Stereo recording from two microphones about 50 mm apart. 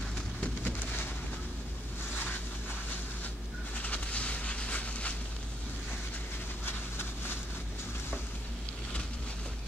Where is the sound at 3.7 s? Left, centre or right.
Left.